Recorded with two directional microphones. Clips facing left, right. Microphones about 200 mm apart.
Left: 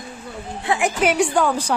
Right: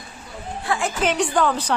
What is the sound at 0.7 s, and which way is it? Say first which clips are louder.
A woman's voice: left 3 dB; 15° left (ahead or behind).